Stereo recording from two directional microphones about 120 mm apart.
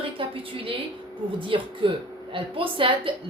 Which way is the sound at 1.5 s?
45° right (ahead or behind).